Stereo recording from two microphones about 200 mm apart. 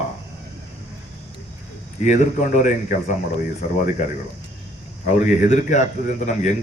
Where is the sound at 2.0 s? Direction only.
40° left (ahead or behind).